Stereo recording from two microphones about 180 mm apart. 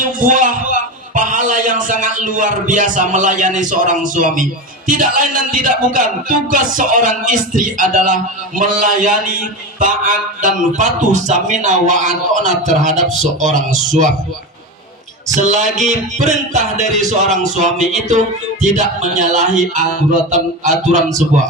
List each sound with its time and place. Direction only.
0.0 s a man's voice: 45° right (ahead or behind)
4.9 s music: 45° right (ahead or behind)
15.3 s music: 40° right (ahead or behind)